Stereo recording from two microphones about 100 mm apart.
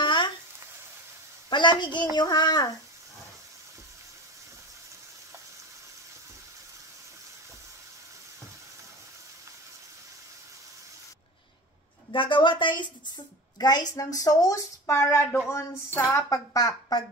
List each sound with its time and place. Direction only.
0.0 s frying: 50° left (ahead or behind)
1.5 s a woman's voice: 50° left (ahead or behind)
12.1 s a woman's voice: 55° left (ahead or behind); by 16.0 s 25° left (ahead or behind)
16.0 s a woman's voice: 35° left (ahead or behind)